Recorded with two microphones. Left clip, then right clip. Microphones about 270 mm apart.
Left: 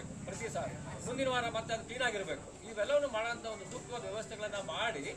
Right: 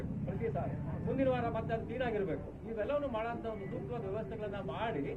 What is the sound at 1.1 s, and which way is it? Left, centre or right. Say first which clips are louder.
A man's voice: even; centre.